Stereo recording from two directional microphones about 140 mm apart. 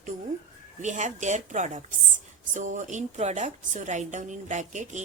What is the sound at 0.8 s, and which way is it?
A woman's voice, 60° right (ahead or behind).